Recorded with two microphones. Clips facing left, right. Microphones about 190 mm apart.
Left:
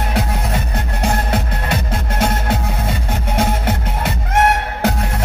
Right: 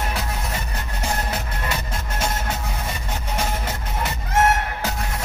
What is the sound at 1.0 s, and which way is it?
Music, 60° left (ahead or behind).